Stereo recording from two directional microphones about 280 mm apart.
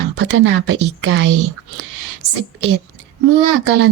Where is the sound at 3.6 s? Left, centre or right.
Right.